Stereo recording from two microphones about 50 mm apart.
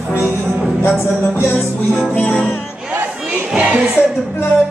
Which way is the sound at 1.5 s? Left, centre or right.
Left.